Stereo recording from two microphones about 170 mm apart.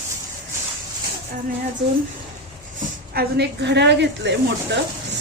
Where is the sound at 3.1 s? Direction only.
70° right (ahead or behind).